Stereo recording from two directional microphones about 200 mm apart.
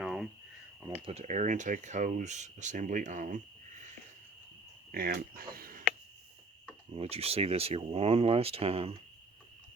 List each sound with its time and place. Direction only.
0.0 s a sound: 5° right (ahead or behind)
1.0 s speech: 35° right (ahead or behind)
6.9 s speech: 30° right (ahead or behind)